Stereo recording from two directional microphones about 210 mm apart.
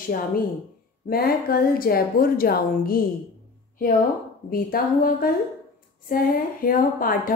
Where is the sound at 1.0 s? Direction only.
45° left (ahead or behind).